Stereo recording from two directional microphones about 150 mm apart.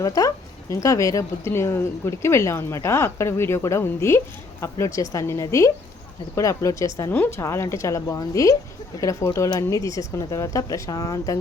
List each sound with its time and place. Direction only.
0.0 s speech: 20° left (ahead or behind)